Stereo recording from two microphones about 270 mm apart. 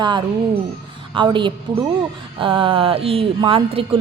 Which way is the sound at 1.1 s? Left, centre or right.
Centre.